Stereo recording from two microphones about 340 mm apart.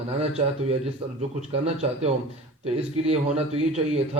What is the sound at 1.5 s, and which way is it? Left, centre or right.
A man's voice, centre.